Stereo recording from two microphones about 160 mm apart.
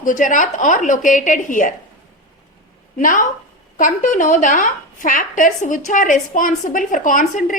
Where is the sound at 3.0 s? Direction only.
55° left (ahead or behind).